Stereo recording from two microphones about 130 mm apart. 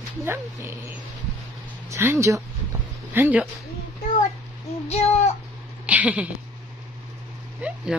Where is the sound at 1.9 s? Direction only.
20° right (ahead or behind).